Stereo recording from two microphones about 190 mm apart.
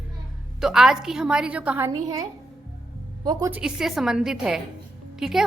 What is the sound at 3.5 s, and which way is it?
A woman's voice, 5° right (ahead or behind).